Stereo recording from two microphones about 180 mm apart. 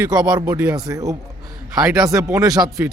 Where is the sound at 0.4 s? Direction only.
10° right (ahead or behind).